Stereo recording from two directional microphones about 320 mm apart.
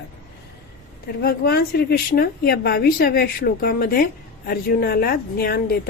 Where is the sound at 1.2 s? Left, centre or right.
Left.